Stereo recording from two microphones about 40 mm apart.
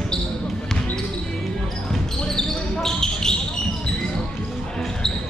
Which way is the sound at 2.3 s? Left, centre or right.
Centre.